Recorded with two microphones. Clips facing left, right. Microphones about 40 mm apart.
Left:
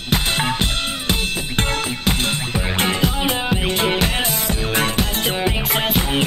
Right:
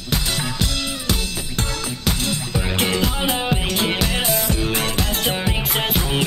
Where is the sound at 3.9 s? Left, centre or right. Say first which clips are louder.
Left 1 dB; left.